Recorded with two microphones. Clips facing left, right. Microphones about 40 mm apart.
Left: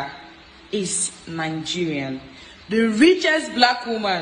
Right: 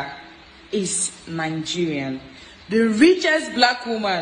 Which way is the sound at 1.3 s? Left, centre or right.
Left.